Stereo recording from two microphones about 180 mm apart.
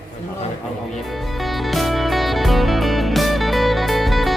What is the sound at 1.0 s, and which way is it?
Music, centre (ahead or behind).